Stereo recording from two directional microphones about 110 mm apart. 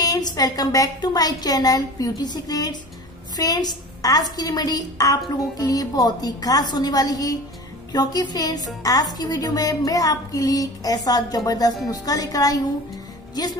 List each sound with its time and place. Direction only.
0.0 s a woman's voice: 35° left (ahead or behind)